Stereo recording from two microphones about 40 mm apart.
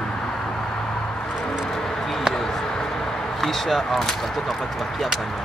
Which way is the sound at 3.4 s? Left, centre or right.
Centre.